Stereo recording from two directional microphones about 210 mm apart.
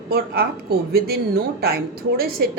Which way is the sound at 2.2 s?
45° right (ahead or behind).